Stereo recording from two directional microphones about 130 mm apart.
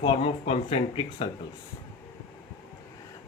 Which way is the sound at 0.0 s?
45° left (ahead or behind).